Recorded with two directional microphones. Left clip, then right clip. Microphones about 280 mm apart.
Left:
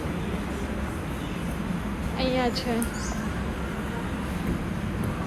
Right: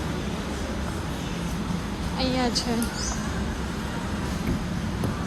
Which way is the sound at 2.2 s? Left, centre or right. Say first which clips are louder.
Even; centre.